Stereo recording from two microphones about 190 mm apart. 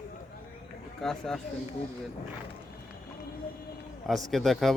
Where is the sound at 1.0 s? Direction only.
Centre (ahead or behind).